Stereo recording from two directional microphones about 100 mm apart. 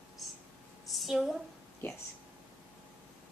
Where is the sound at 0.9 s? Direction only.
Centre (ahead or behind).